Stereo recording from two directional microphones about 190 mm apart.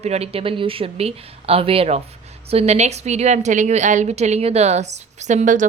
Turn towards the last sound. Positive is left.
turn(degrees=-40)  # may be behind; listen again after turning